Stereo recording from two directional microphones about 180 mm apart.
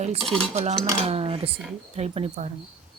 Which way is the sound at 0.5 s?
40° right (ahead or behind).